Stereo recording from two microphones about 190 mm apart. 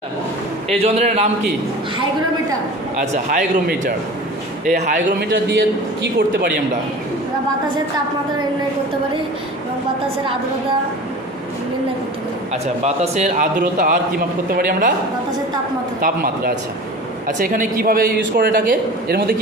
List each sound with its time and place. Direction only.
0.7 s a man's voice: 35° right (ahead or behind)
3.0 s a man's voice: 50° right (ahead or behind)
12.8 s a man's voice: 40° right (ahead or behind)
16.0 s a man's voice: 50° right (ahead or behind)